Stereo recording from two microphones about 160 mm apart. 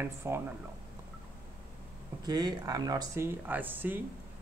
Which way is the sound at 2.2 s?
25° right (ahead or behind).